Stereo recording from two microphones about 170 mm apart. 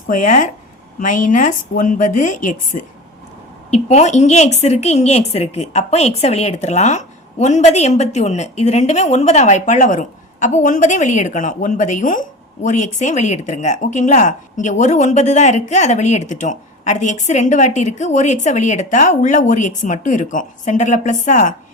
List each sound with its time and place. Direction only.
0.1 s a woman's voice: 50° left (ahead or behind)